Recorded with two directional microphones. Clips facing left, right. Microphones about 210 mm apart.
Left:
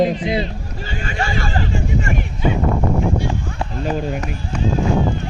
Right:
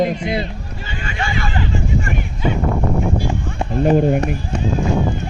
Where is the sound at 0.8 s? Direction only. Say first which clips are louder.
Left 2 dB; 40° left (ahead or behind).